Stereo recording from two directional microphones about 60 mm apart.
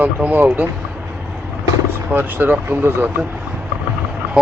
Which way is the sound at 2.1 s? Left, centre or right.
Right.